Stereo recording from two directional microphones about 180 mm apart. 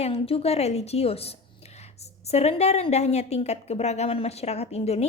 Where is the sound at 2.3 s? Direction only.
35° left (ahead or behind).